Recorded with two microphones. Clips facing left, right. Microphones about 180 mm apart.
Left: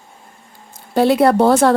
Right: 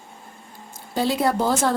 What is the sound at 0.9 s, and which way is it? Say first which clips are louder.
Speech: left 9 dB; 65° left (ahead or behind).